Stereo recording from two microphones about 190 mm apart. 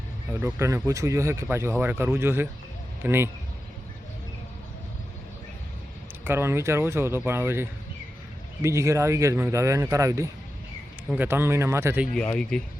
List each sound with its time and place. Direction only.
0.3 s a man's voice: 10° right (ahead or behind)
6.2 s speech: 10° right (ahead or behind)
12.1 s speech: 5° left (ahead or behind)